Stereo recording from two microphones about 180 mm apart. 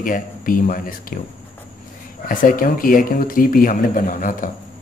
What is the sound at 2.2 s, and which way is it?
Speech, 50° left (ahead or behind).